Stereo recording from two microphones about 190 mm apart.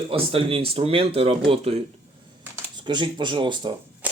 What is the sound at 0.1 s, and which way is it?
Speech, 30° right (ahead or behind).